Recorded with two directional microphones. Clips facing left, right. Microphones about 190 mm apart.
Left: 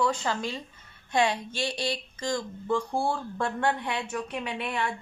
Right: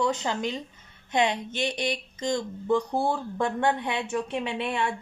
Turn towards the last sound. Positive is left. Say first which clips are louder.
# right 3 dB
turn(degrees=-25)  # may be behind; listen again after turning